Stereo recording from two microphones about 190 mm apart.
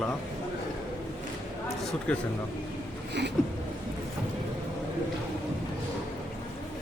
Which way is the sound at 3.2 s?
65° right (ahead or behind).